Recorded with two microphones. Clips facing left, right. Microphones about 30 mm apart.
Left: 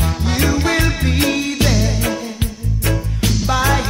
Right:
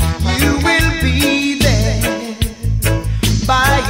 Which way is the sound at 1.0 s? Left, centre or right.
Right.